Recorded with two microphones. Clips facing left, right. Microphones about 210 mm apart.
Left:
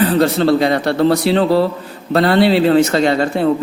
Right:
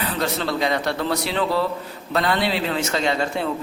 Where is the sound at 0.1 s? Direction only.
30° left (ahead or behind).